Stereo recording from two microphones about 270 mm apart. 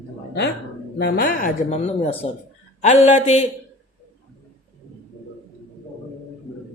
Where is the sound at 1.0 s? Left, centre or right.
Left.